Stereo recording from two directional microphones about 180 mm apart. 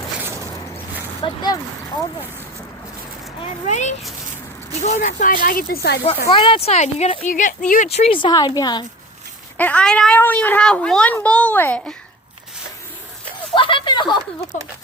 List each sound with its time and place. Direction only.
1.2 s speech: 25° left (ahead or behind)
3.4 s speech: 40° left (ahead or behind); by 6.0 s 60° left (ahead or behind)
6.3 s speech: 30° left (ahead or behind)
9.6 s speech: 5° left (ahead or behind)
13.5 s speech: 30° left (ahead or behind)